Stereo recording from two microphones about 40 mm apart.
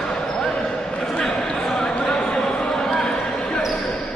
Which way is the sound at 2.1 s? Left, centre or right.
Left.